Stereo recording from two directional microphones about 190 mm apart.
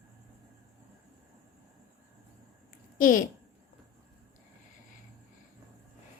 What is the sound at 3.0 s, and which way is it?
Speech, 45° left (ahead or behind).